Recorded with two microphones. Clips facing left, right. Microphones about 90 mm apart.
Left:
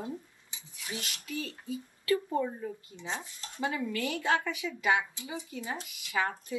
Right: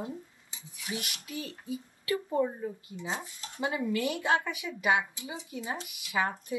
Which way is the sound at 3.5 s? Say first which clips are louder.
Right 2 dB; 20° right (ahead or behind).